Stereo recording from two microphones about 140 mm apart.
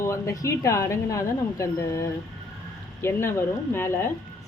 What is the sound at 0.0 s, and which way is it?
A woman's voice, 20° left (ahead or behind).